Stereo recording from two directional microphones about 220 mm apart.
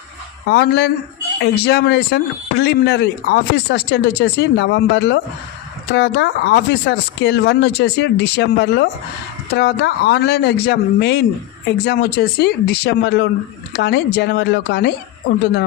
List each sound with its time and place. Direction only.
0.4 s speech: 50° left (ahead or behind)